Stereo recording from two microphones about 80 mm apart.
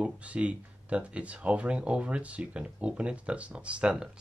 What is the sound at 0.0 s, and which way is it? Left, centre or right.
Speech, centre.